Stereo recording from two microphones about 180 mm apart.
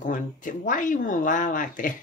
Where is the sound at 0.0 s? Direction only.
45° left (ahead or behind).